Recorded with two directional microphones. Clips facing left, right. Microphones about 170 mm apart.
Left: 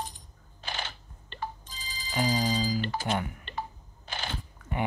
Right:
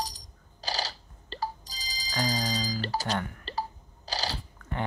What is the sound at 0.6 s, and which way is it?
Telephone, 35° right (ahead or behind).